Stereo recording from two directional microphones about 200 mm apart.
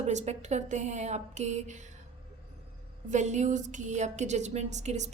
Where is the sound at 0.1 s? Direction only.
35° right (ahead or behind).